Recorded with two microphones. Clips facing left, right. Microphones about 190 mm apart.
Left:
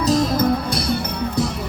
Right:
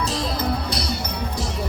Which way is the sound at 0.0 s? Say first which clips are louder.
Left 7 dB; 45° left (ahead or behind).